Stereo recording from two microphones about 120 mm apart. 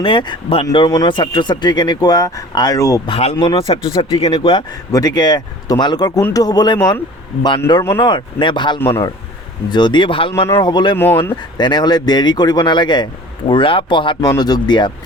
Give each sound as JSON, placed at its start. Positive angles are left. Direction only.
{"t": 0.0, "sound": "speech", "side_deg": 45}
{"t": 3.1, "sound": "speech", "side_deg": 55}
{"t": 3.3, "sound": "speech", "side_deg": 40}
{"t": 10.6, "sound": "speech", "side_deg": 40}
{"t": 10.9, "sound": "speech", "side_deg": 15}
{"t": 11.5, "sound": "speech", "side_deg": 35}